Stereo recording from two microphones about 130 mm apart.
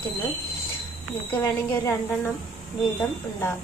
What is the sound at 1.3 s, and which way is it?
Speech, 20° left (ahead or behind).